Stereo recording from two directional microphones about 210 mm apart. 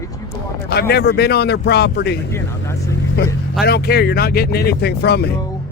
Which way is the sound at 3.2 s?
50° left (ahead or behind).